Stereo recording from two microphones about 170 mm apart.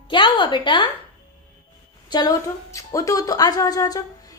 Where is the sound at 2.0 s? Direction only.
20° left (ahead or behind).